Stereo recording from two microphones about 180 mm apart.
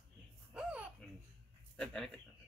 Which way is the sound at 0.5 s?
5° right (ahead or behind).